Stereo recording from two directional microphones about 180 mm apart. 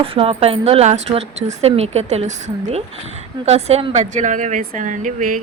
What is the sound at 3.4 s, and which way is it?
A woman's voice, 35° right (ahead or behind).